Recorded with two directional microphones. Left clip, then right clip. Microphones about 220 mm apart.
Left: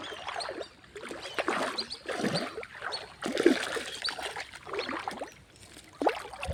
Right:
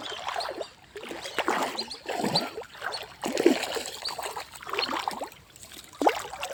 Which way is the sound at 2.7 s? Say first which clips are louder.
Right 3 dB; 55° right (ahead or behind).